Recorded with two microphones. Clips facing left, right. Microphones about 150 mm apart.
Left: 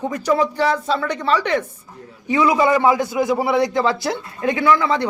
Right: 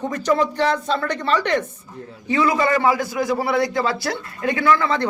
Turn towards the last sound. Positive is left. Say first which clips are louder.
# left 1 dB
turn(degrees=15)  # may be behind; listen again after turning